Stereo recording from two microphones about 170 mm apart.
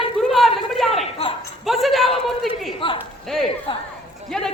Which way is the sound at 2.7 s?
30° left (ahead or behind).